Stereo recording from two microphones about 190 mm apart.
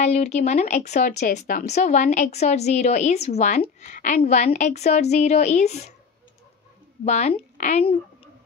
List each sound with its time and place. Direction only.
0.0 s a woman's voice: 35° left (ahead or behind)
1.3 s a woman's voice: 55° left (ahead or behind); by 5.9 s 35° left (ahead or behind)
7.1 s a woman's voice: 35° left (ahead or behind)